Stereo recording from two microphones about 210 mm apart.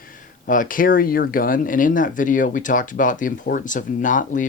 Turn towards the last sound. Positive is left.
turn(degrees=35)  # may be behind; listen again after turning